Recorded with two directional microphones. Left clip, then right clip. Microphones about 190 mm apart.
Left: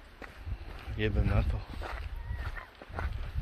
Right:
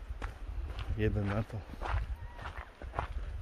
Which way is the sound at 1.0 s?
20° right (ahead or behind).